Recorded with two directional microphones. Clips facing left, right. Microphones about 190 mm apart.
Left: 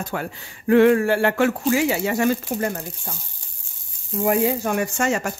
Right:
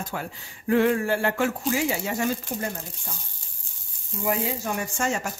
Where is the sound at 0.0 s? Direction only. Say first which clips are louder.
Left 5 dB; 65° left (ahead or behind).